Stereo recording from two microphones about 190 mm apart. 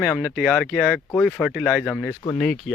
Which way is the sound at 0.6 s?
5° left (ahead or behind).